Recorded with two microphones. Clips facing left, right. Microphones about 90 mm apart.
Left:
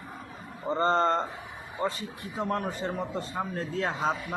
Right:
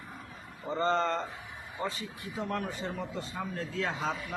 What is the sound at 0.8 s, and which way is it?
Speech, 40° left (ahead or behind).